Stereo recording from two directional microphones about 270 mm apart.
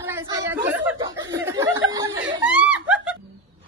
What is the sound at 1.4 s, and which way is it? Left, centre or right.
Chuckle, centre.